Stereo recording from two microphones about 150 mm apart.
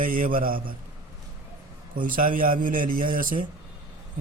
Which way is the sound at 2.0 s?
65° right (ahead or behind).